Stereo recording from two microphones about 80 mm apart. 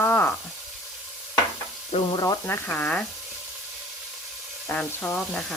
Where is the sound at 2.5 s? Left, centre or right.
Left.